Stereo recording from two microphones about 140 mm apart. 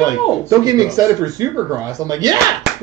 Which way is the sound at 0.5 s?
25° right (ahead or behind).